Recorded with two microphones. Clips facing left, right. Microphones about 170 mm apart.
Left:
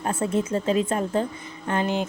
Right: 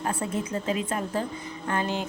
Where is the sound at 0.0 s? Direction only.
25° left (ahead or behind).